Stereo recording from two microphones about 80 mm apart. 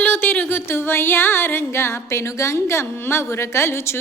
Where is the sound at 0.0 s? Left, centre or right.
Left.